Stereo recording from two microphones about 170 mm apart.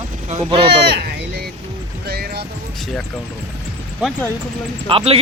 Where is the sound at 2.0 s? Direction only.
65° right (ahead or behind).